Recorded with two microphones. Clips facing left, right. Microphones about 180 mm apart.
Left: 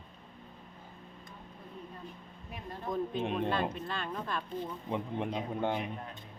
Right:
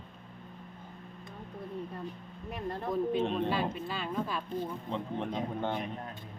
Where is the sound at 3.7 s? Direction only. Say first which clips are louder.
Right 3 dB; 5° right (ahead or behind).